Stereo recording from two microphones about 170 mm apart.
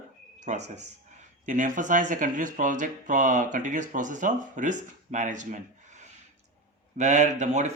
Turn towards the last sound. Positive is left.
turn(degrees=-45)  # may be behind; listen again after turning